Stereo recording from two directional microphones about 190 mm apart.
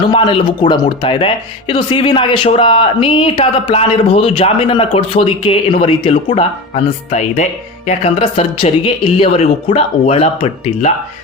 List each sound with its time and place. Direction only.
0.1 s speech: 25° left (ahead or behind)